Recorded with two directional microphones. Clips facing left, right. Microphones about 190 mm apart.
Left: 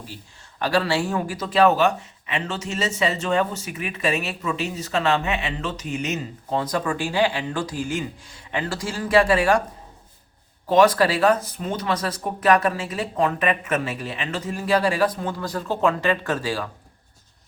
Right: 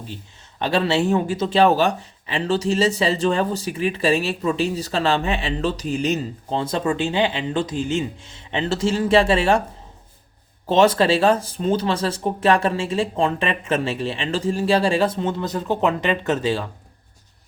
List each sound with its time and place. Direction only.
0.6 s speech: 20° right (ahead or behind)
10.7 s speech: 25° right (ahead or behind)